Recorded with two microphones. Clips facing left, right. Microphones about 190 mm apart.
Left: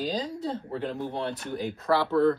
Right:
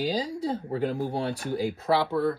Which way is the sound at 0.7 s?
40° right (ahead or behind).